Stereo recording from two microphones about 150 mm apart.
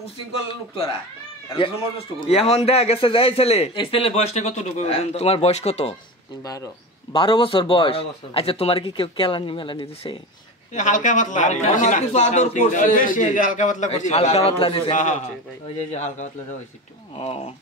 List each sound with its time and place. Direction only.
0.0 s a man's voice: 35° left (ahead or behind)
6.4 s speech: 25° left (ahead or behind)
7.2 s speech: 35° left (ahead or behind)
10.7 s a man's voice: 55° left (ahead or behind); by 14.8 s 40° left (ahead or behind)
14.9 s a man's voice: 55° left (ahead or behind)